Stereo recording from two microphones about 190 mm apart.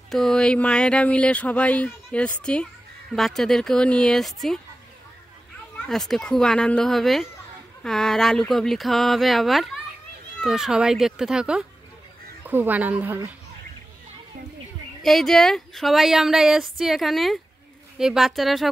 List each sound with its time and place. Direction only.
0.1 s speech: 5° left (ahead or behind)
5.8 s speech: centre (ahead or behind)
15.0 s speech: centre (ahead or behind)